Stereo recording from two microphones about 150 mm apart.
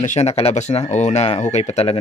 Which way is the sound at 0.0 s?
50° left (ahead or behind).